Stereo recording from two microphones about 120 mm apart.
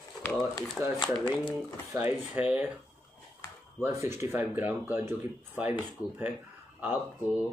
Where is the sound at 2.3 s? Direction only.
15° right (ahead or behind).